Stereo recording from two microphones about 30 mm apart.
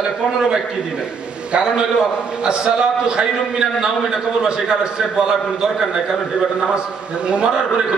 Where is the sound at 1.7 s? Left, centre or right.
Right.